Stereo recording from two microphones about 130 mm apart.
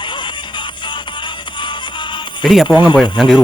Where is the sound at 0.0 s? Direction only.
35° left (ahead or behind).